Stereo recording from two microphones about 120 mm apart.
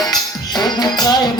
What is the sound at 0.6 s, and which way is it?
Music, 35° left (ahead or behind).